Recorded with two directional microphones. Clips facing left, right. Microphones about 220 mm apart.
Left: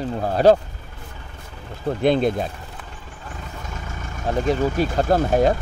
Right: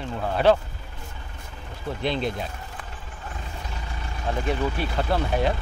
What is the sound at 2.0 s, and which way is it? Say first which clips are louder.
Speech: left 8 dB; 50° left (ahead or behind).